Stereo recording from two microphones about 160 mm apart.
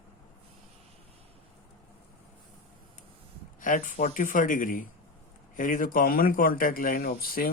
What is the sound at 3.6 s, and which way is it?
Speech, 55° left (ahead or behind).